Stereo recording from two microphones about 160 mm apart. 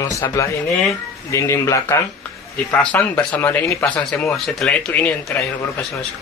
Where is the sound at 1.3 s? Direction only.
15° left (ahead or behind).